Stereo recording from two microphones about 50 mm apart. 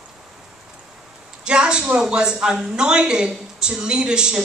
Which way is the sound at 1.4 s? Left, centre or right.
Centre.